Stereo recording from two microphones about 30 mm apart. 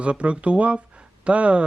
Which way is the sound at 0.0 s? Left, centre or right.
Right.